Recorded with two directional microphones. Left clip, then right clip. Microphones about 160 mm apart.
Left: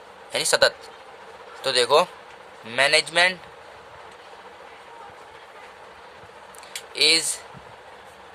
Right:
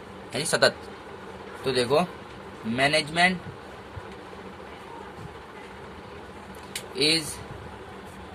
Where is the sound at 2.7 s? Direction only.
90° left.